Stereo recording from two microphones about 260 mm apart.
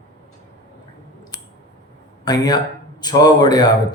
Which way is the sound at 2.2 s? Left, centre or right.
Centre.